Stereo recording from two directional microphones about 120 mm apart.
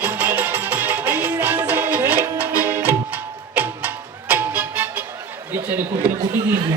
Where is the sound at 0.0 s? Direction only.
15° right (ahead or behind).